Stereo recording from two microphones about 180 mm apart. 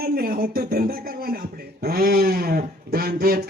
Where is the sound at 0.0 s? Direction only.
55° right (ahead or behind).